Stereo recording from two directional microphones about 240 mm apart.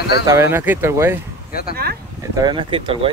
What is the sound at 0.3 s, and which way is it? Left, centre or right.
Speech, centre.